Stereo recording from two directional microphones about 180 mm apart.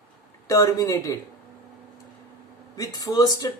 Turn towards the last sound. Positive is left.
turn(degrees=20)  # may be behind; listen again after turning